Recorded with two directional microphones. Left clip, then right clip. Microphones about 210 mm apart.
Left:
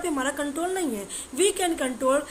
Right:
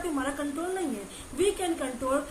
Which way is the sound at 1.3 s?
55° left (ahead or behind).